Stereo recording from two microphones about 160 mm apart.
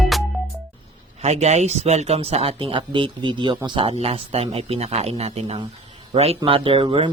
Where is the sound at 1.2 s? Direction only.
40° right (ahead or behind).